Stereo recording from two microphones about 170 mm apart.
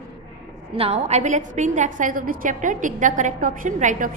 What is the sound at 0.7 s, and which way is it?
A woman's voice, 35° right (ahead or behind).